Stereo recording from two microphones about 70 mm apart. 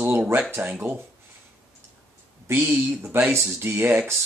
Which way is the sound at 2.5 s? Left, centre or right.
Centre.